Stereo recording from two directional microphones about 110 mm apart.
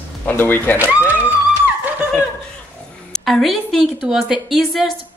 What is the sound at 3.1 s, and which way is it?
A woman's voice, centre (ahead or behind).